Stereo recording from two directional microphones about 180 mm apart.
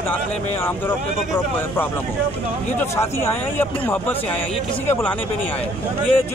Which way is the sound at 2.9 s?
15° left (ahead or behind).